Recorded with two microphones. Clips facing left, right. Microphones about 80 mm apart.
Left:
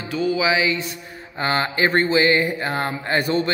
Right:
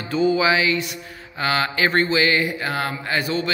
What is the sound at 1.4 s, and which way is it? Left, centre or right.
A man's voice, left.